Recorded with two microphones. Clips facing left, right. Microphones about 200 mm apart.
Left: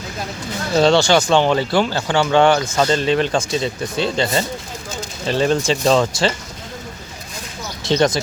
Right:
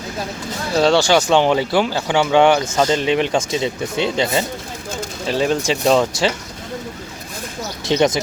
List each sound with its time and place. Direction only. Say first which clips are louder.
0.8 s speech: left 1 dB; 10° right (ahead or behind)
7.9 s speech: even; 15° right (ahead or behind)